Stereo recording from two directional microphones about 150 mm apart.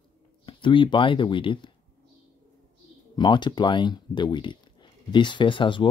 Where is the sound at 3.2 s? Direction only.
30° left (ahead or behind).